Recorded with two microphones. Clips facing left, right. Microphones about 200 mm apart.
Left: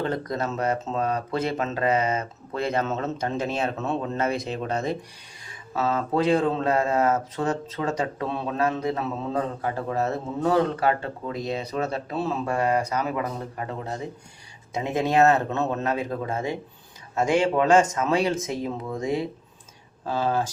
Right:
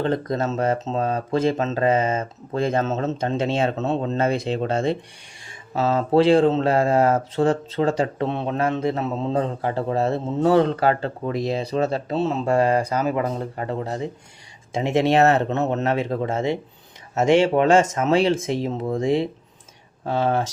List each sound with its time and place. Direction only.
0.0 s speech: 30° right (ahead or behind)
2.5 s speech: 40° right (ahead or behind)
2.9 s speech: 25° right (ahead or behind)
14.9 s speech: 25° right (ahead or behind)